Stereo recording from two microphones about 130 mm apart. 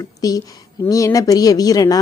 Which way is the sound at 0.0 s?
30° left (ahead or behind).